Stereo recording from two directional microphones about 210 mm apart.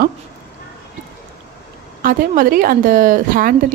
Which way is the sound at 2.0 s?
40° right (ahead or behind).